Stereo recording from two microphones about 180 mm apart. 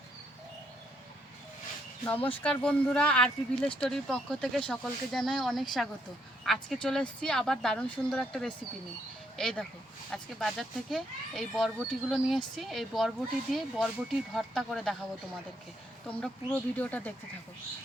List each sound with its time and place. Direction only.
2.0 s speech: 10° left (ahead or behind)
16.0 s speech: 5° left (ahead or behind)